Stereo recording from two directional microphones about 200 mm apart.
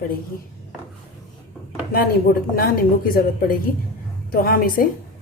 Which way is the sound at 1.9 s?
50° left (ahead or behind).